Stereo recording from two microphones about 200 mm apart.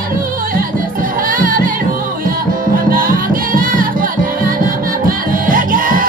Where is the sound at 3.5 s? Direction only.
45° right (ahead or behind).